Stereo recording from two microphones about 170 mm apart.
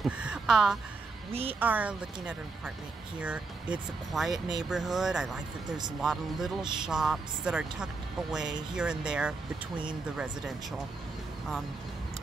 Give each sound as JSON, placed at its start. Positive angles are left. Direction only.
{"t": 0.0, "sound": "speech", "side_deg": -5}
{"t": 1.3, "sound": "a woman's voice", "side_deg": -35}
{"t": 1.6, "sound": "speech", "side_deg": -10}
{"t": 3.7, "sound": "speech", "side_deg": 0}
{"t": 4.3, "sound": "speech", "side_deg": -25}
{"t": 4.6, "sound": "speech", "side_deg": -5}